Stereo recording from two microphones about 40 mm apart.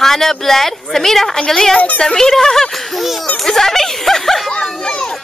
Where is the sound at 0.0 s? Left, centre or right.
Centre.